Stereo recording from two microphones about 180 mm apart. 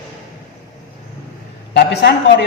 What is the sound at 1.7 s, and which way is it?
Speech, 70° left (ahead or behind).